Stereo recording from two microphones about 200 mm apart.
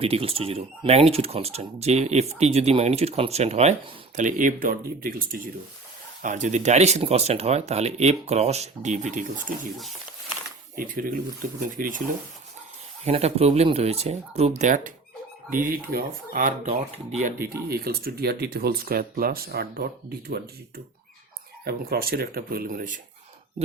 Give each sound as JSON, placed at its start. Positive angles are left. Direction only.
{"t": 0.0, "sound": "speech", "side_deg": -30}
{"t": 10.8, "sound": "speech", "side_deg": -45}
{"t": 13.1, "sound": "speech", "side_deg": -30}
{"t": 17.7, "sound": "speech", "side_deg": -50}